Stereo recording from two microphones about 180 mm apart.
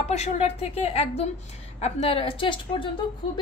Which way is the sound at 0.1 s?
35° left (ahead or behind).